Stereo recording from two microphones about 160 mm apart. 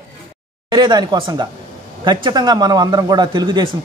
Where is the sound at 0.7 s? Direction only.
25° right (ahead or behind).